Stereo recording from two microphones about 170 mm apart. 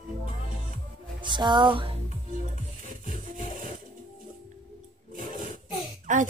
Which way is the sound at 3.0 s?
55° right (ahead or behind).